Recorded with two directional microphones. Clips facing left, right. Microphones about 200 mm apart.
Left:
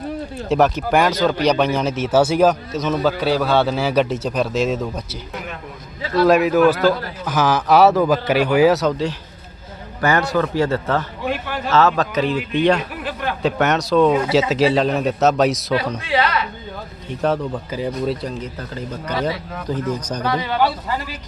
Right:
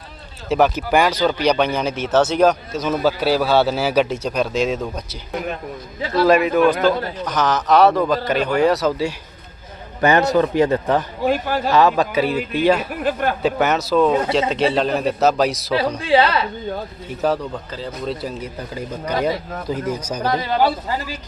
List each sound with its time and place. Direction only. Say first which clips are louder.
0.4 s a man's voice: even; centre (ahead or behind)
6.2 s a man's voice: left 1 dB; centre (ahead or behind)
6.7 s a man's voice: even; 20° right (ahead or behind)
7.3 s a man's voice: left 2 dB; 5° left (ahead or behind)
10.0 s a man's voice: right 3 dB; 20° right (ahead or behind)
11.2 s a man's voice: right 5 dB; 40° right (ahead or behind)
11.7 s a man's voice: even; 15° right (ahead or behind)
12.9 s speech: right 5 dB; 45° right (ahead or behind)
13.4 s a man's voice: left 2 dB; centre (ahead or behind)
16.0 s a man's voice: right 4 dB; 30° right (ahead or behind)
17.2 s a man's voice: even; centre (ahead or behind)
17.7 s speech: left 5 dB; 10° left (ahead or behind)
18.1 s speech: left 1 dB; 5° right (ahead or behind)
20.2 s a man's voice: right 1 dB; 40° right (ahead or behind)